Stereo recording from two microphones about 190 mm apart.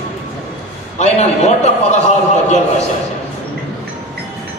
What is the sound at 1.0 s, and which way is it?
A man's voice, 35° left (ahead or behind).